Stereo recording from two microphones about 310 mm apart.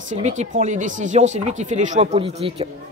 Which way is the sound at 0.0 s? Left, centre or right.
Right.